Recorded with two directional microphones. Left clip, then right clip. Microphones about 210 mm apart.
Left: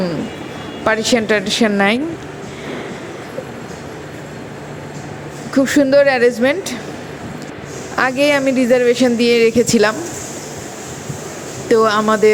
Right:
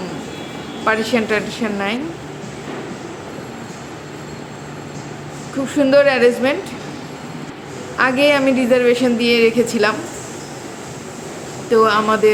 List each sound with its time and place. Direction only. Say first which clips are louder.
0.9 s a woman's voice: left 2 dB; 30° left (ahead or behind)
5.6 s a woman's voice: even; 30° left (ahead or behind)
7.9 s a woman's voice: even; 35° left (ahead or behind)
11.7 s a woman's voice: left 1 dB; 35° left (ahead or behind)